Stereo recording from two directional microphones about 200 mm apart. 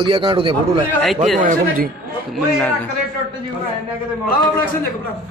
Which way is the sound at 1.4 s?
45° right (ahead or behind).